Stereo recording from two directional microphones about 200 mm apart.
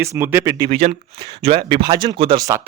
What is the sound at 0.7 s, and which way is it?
Speech, 30° right (ahead or behind).